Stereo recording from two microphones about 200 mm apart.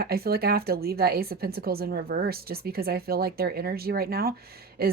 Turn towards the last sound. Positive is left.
turn(degrees=-50)  # may be behind; listen again after turning